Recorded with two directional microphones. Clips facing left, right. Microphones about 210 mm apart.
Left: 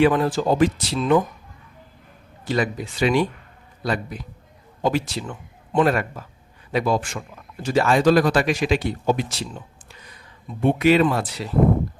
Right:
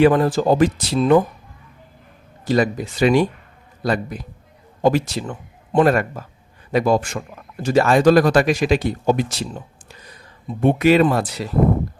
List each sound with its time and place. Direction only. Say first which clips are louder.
0.0 s speech: right 4 dB; 45° right (ahead or behind)
2.4 s a man's voice: right 5 dB; 40° right (ahead or behind)
10.6 s speech: right 2 dB; 45° right (ahead or behind)